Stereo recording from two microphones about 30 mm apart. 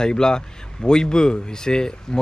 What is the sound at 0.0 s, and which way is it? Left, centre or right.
A man's voice, left.